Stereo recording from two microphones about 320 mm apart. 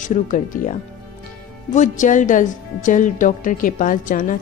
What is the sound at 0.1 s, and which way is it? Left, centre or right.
A woman's voice, left.